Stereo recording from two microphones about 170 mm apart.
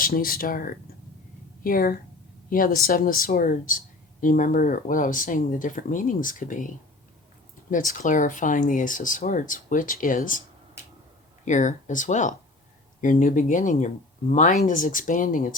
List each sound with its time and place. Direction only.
0.0 s speech: 60° left (ahead or behind)
7.7 s speech: 50° left (ahead or behind)
11.4 s speech: 45° left (ahead or behind)